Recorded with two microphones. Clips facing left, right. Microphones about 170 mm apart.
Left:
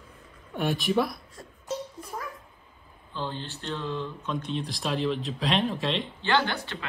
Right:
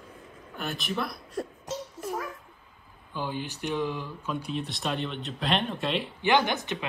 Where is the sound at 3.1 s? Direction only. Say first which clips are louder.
Right 1 dB; 10° right (ahead or behind).